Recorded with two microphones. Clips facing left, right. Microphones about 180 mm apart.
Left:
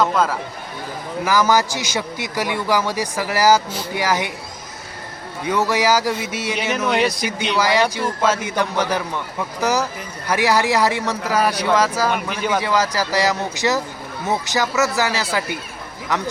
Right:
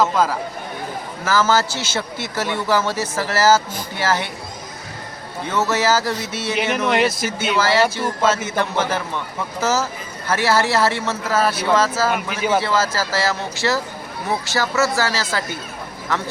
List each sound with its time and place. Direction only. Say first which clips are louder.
0.0 s speech: even; centre (ahead or behind)
1.2 s a man's voice: left 1 dB; 15° left (ahead or behind)
5.5 s a man's voice: left 1 dB; 10° left (ahead or behind)
6.8 s speech: even; centre (ahead or behind)
7.6 s a man's voice: even; 15° left (ahead or behind)
12.0 s speech: right 1 dB; 5° right (ahead or behind)
12.6 s a man's voice: left 1 dB; 15° left (ahead or behind)